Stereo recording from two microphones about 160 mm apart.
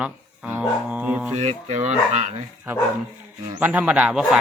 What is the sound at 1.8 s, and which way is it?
Speech, 45° right (ahead or behind).